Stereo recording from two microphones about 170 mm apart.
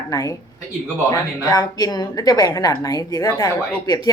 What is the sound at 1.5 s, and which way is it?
A woman's voice, 25° left (ahead or behind).